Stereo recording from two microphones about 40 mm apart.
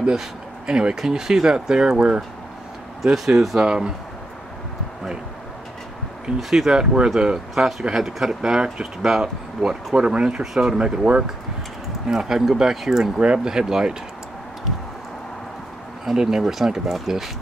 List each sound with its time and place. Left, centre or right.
0.0 s speech: centre
3.0 s speech: centre
3.6 s speech: right
6.5 s speech: centre
10.8 s speech: right
12.1 s speech: centre
13.2 s speech: right
16.2 s speech: centre